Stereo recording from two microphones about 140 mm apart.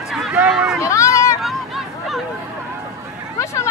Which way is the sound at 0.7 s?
20° left (ahead or behind).